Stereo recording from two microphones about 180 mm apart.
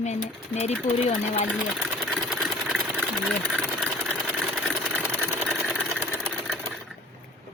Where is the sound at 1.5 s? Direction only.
Centre (ahead or behind).